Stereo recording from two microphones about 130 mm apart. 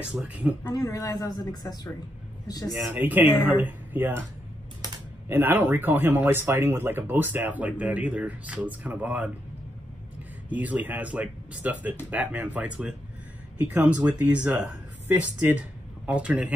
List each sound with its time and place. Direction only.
0.0 s speech: 10° right (ahead or behind)
0.7 s a man's voice: 25° left (ahead or behind)
2.9 s speech: 15° right (ahead or behind)
5.3 s speech: 15° right (ahead or behind)
10.5 s speech: 10° right (ahead or behind)